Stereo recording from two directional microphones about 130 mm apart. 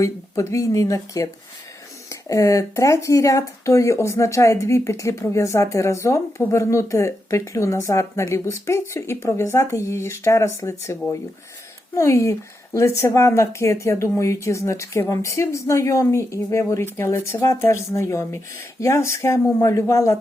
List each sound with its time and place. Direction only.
0.0 s speech: 25° left (ahead or behind)
2.3 s speech: 25° left (ahead or behind)
11.9 s speech: 20° left (ahead or behind)